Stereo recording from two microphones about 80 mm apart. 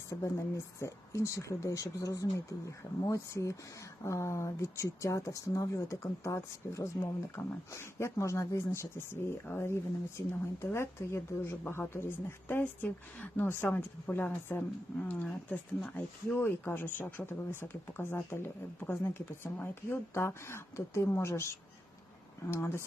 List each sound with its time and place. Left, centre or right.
0.1 s speech: left